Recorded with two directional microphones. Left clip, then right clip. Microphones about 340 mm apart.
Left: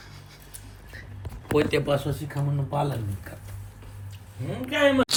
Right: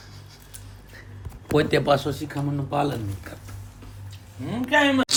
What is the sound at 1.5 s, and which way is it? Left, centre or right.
Speech, right.